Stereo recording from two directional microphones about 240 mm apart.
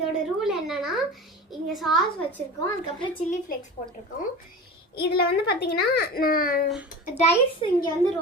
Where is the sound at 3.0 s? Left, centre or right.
Left.